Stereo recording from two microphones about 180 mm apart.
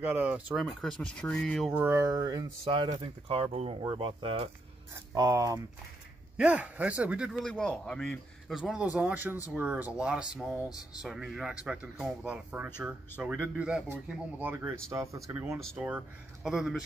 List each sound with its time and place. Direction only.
0.0 s speech: 10° right (ahead or behind)
1.7 s speech: 10° right (ahead or behind)
6.3 s speech: 5° right (ahead or behind)